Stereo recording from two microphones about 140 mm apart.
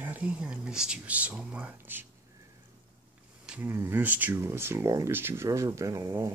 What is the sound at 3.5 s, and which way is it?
Speech, 15° right (ahead or behind).